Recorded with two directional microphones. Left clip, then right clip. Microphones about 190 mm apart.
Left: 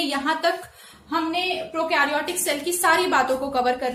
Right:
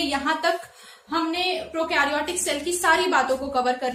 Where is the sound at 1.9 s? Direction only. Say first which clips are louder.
Left 1 dB; 20° left (ahead or behind).